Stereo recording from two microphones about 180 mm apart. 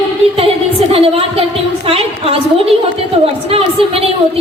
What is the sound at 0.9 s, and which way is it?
Music, 35° right (ahead or behind).